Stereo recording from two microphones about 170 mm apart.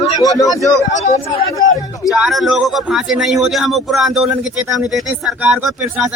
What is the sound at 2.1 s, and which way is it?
Speech, centre (ahead or behind).